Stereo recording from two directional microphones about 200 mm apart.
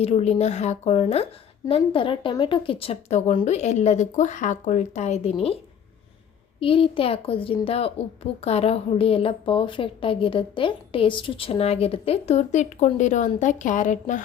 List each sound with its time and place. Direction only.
0.0 s a woman's voice: 30° left (ahead or behind)
6.6 s a woman's voice: 25° left (ahead or behind)